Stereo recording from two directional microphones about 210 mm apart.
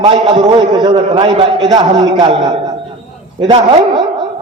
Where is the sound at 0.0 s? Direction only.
20° right (ahead or behind).